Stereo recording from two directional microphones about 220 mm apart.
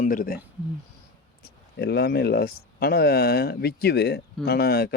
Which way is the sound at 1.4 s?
50° left (ahead or behind).